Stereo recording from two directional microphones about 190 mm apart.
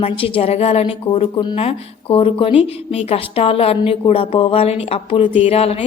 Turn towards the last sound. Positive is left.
turn(degrees=30)  # may be behind; listen again after turning